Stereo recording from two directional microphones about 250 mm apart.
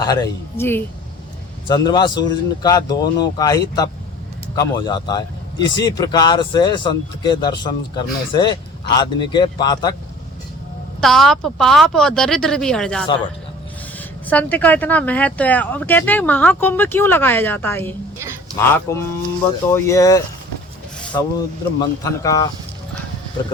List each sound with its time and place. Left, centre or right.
0.0 s a man's voice: centre
11.0 s speech: centre
14.3 s speech: centre
21.0 s a sound: centre
21.8 s speech: centre